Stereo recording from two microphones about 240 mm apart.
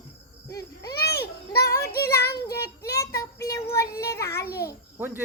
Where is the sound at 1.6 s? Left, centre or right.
Centre.